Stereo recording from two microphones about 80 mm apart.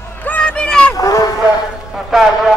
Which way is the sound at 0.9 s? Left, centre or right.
Left.